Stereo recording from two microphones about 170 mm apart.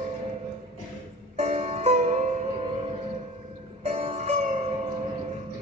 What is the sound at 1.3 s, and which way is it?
Music, 40° right (ahead or behind).